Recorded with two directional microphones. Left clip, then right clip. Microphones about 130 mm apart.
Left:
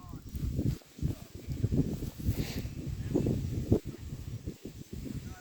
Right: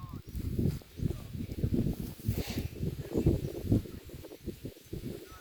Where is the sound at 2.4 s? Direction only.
15° left (ahead or behind).